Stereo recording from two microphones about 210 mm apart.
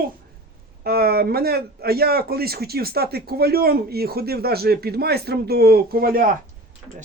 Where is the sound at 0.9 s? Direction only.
45° right (ahead or behind).